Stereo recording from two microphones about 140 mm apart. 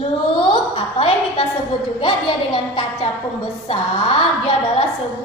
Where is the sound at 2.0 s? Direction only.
35° left (ahead or behind).